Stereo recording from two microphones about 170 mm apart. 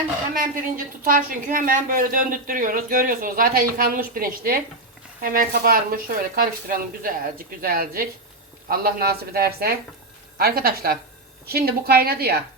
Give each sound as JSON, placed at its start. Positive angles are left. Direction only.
{"t": 1.0, "sound": "a woman's voice", "side_deg": -55}